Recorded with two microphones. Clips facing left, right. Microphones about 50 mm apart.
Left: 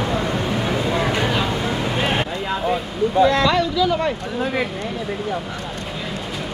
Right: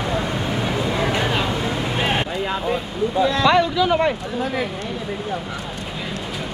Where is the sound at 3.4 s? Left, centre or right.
Right.